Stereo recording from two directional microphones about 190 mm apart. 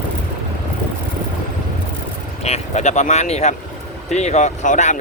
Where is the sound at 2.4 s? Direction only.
35° left (ahead or behind).